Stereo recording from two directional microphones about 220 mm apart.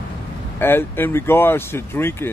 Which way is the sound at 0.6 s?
10° left (ahead or behind).